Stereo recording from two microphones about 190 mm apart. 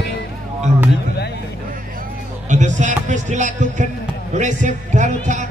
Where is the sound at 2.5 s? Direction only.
40° right (ahead or behind).